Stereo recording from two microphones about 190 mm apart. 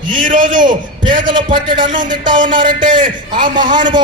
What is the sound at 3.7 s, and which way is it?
Speech, 25° right (ahead or behind).